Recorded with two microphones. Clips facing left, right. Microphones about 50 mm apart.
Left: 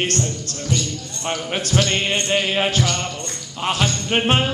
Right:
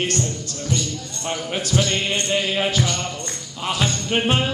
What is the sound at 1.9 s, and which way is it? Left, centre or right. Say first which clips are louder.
Music: left 2 dB; left.